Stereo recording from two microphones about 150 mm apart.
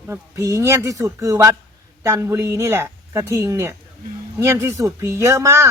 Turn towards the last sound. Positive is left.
turn(degrees=-20)  # may be behind; listen again after turning